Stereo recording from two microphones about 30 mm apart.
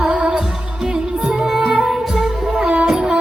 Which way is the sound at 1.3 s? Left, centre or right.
Centre.